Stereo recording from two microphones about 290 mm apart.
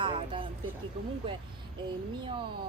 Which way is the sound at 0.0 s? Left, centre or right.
Centre.